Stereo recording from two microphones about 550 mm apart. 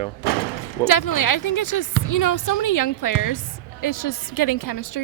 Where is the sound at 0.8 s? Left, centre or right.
Left.